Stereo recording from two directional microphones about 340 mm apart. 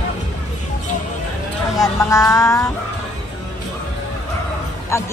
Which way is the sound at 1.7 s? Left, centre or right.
Centre.